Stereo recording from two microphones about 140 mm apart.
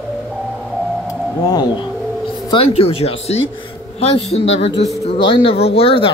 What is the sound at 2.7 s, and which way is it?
Speech, 45° left (ahead or behind).